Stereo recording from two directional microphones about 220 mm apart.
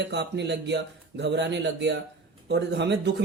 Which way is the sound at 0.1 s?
50° right (ahead or behind).